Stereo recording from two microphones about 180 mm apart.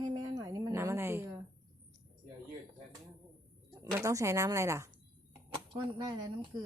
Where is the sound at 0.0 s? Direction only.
20° right (ahead or behind).